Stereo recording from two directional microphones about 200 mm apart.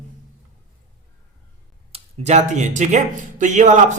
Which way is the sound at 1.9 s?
35° right (ahead or behind).